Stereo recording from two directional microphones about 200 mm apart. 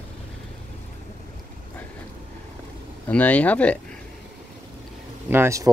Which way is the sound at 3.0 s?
5° left (ahead or behind).